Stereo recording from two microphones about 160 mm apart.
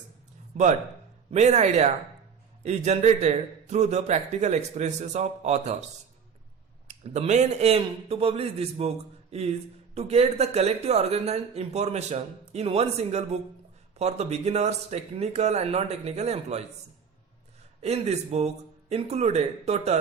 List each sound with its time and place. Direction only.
1.3 s a man's voice: 45° right (ahead or behind)
6.8 s speech: 45° right (ahead or behind)
9.9 s a man's voice: 40° right (ahead or behind)
17.7 s speech: 40° right (ahead or behind)